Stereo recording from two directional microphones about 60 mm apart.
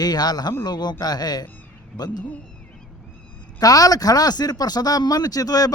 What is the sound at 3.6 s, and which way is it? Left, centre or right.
Speech, left.